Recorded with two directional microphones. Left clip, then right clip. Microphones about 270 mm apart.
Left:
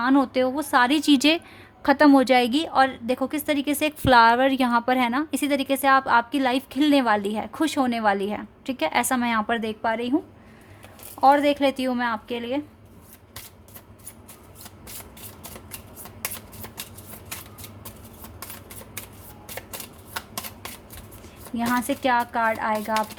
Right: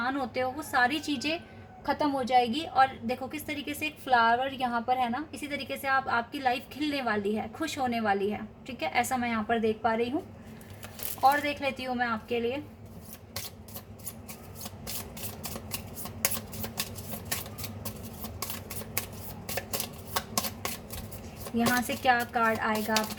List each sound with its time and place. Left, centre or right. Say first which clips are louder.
0.0 s a woman's voice: left 9 dB; left
11.3 s a woman's voice: left 8 dB; left
21.8 s a woman's voice: left 4 dB; left